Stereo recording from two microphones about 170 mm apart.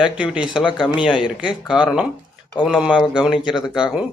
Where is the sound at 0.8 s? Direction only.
5° right (ahead or behind).